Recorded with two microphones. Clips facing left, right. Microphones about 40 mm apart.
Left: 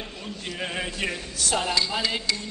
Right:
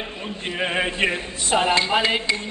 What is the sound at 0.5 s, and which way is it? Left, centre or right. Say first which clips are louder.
A man's voice: right 8 dB; right.